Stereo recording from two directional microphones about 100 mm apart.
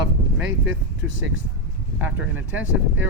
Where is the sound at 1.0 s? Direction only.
10° right (ahead or behind).